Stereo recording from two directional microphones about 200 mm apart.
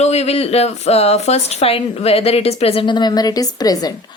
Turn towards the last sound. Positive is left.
turn(degrees=20)  # may be behind; listen again after turning